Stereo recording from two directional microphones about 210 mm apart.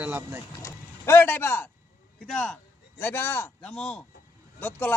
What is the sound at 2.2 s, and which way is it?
Speech, centre (ahead or behind).